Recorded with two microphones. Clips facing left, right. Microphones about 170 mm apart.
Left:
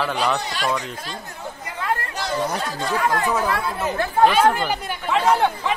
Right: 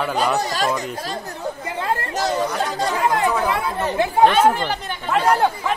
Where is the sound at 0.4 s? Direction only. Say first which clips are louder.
Right 6 dB; 40° right (ahead or behind).